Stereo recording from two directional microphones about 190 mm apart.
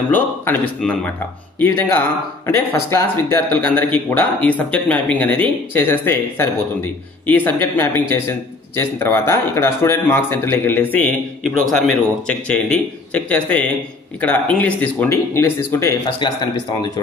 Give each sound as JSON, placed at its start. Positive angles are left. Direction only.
{"t": 0.1, "sound": "a man's voice", "side_deg": 10}
{"t": 16.1, "sound": "speech", "side_deg": 25}